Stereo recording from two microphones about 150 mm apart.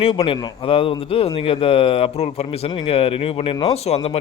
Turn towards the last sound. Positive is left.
turn(degrees=45)  # may be behind; listen again after turning